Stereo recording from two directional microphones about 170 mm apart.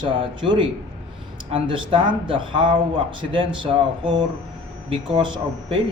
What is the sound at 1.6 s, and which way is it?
Speech, 30° right (ahead or behind).